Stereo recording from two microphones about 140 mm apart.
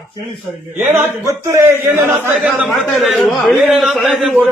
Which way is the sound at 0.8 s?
15° right (ahead or behind).